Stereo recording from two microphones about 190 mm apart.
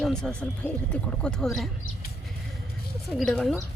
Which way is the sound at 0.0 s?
5° left (ahead or behind).